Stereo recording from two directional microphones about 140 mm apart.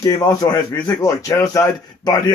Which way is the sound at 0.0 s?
25° left (ahead or behind).